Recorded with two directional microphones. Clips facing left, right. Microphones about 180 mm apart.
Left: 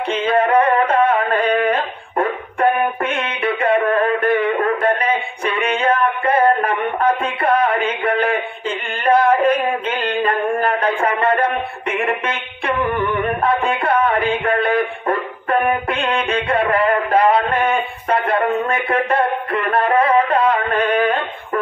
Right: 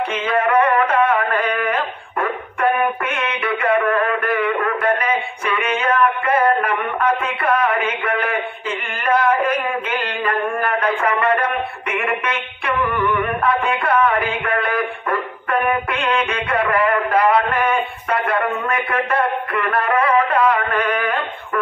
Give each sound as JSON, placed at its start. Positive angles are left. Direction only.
{"t": 0.1, "sound": "music", "side_deg": 30}